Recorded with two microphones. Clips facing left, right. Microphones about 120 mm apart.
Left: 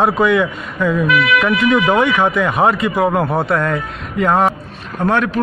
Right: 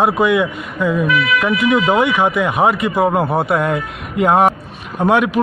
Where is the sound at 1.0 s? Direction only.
80° left.